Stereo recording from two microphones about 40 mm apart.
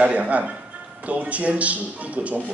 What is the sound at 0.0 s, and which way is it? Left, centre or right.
A man's voice, right.